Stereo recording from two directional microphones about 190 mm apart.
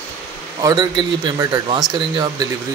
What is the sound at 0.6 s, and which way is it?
A man's voice, 20° right (ahead or behind).